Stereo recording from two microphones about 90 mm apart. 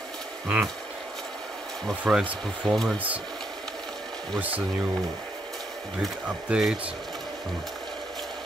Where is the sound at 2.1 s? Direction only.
5° right (ahead or behind).